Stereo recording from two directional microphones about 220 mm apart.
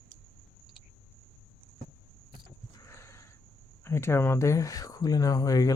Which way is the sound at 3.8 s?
10° left (ahead or behind).